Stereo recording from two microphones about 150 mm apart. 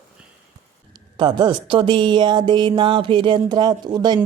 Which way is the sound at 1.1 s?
30° right (ahead or behind).